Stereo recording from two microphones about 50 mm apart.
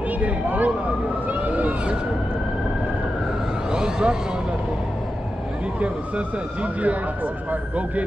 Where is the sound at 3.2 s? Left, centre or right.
Centre.